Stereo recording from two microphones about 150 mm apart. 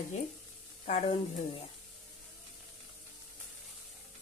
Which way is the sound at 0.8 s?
45° left (ahead or behind).